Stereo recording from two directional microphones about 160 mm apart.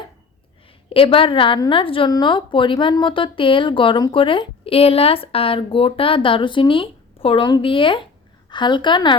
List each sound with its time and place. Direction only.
0.9 s a woman's voice: 35° left (ahead or behind)